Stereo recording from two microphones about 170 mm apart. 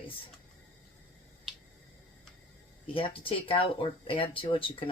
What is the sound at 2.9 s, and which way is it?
Speech, 30° left (ahead or behind).